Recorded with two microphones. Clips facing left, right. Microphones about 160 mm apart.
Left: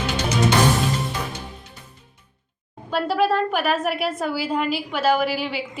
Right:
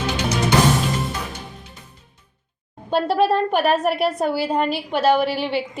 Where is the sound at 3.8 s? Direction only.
35° right (ahead or behind).